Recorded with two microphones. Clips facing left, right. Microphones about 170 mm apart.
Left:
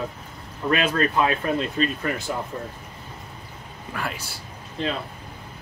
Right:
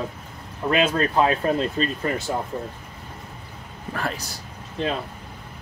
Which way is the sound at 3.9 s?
40° right (ahead or behind).